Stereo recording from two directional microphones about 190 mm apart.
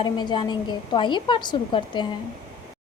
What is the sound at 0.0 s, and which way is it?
A woman's voice, 25° left (ahead or behind).